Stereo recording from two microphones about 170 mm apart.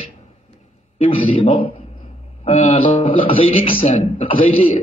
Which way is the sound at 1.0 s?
35° left (ahead or behind).